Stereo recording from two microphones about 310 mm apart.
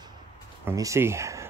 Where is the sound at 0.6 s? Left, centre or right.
Centre.